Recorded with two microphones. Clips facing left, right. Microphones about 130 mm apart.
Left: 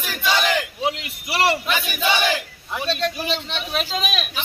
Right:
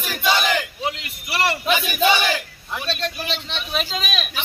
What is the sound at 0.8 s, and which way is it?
Speech, 20° left (ahead or behind).